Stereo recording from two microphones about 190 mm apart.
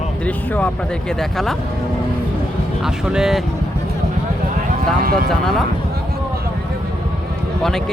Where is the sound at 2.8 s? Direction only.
5° right (ahead or behind).